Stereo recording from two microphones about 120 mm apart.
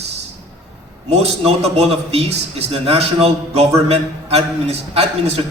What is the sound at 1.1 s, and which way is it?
A man's voice, 60° right (ahead or behind).